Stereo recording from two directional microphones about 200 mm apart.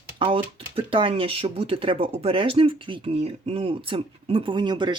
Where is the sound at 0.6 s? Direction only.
25° right (ahead or behind).